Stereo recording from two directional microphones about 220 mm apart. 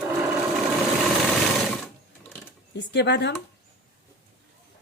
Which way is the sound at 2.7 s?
50° left (ahead or behind).